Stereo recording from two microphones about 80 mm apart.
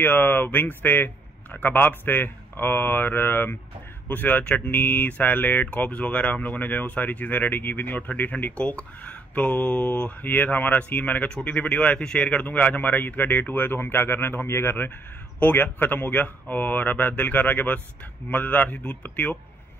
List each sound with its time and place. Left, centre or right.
0.0 s speech: left